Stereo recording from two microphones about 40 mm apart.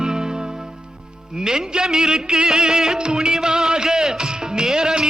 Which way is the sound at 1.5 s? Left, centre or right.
Centre.